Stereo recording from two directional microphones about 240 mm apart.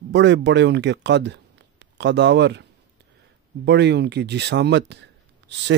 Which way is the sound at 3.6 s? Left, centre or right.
Right.